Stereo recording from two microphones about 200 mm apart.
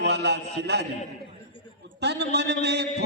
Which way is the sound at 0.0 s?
60° right (ahead or behind).